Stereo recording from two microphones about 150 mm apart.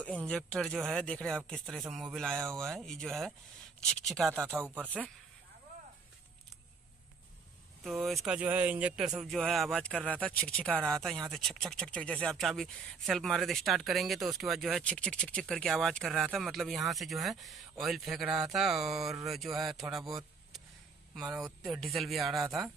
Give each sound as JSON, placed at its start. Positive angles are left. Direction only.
{"t": 0.0, "sound": "speech", "side_deg": 10}
{"t": 4.3, "sound": "speech", "side_deg": -15}
{"t": 7.8, "sound": "speech", "side_deg": 0}
{"t": 8.4, "sound": "speech", "side_deg": -10}
{"t": 22.4, "sound": "speech", "side_deg": -20}